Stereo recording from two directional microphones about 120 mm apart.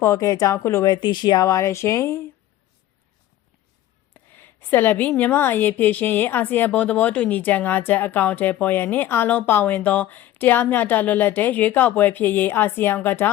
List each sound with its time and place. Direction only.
0.0 s speech: 25° left (ahead or behind)
0.9 s speech: 40° left (ahead or behind)
4.1 s a woman's voice: 15° left (ahead or behind)